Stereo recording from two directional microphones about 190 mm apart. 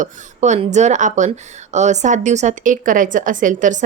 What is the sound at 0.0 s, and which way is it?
A woman's voice, 40° right (ahead or behind).